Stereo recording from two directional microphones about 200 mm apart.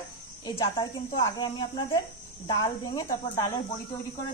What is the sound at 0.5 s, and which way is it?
Speech, 25° left (ahead or behind).